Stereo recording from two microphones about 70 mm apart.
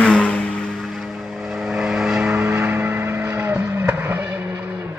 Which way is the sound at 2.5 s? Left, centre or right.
Right.